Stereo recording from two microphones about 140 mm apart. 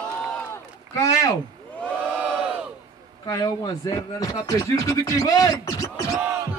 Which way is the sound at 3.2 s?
25° left (ahead or behind).